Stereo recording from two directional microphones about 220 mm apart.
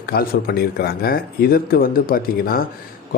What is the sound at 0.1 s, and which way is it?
Speech, 45° left (ahead or behind).